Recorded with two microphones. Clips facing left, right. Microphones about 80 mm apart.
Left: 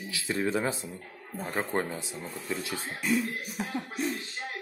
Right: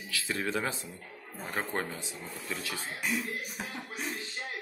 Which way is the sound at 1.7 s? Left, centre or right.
Left.